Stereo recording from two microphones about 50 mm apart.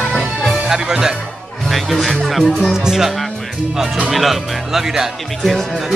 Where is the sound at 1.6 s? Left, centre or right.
Centre.